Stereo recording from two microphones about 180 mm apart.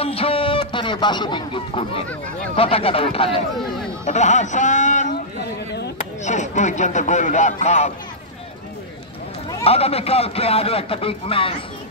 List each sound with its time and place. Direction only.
0.0 s a sound: 30° left (ahead or behind)
2.5 s a man's voice: 30° left (ahead or behind)
6.2 s a man's voice: 40° left (ahead or behind)
9.5 s a man's voice: 30° left (ahead or behind)